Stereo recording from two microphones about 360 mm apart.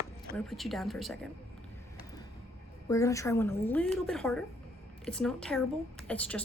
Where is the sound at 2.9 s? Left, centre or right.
Centre.